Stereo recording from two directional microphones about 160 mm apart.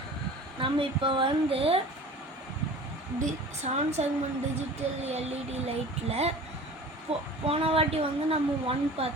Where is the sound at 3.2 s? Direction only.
45° right (ahead or behind).